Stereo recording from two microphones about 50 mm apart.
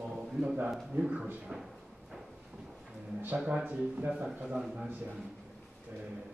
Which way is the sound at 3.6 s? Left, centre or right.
Right.